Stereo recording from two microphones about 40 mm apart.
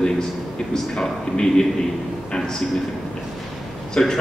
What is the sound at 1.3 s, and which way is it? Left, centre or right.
Speech, centre.